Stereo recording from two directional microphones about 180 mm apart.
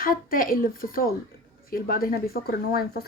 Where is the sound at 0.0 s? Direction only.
50° left (ahead or behind).